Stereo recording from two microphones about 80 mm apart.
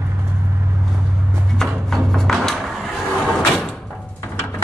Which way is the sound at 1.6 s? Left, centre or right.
Centre.